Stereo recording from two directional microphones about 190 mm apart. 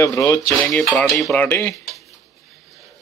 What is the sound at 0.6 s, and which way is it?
Speech, centre (ahead or behind).